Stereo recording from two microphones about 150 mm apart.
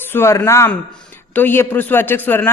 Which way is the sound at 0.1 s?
15° left (ahead or behind).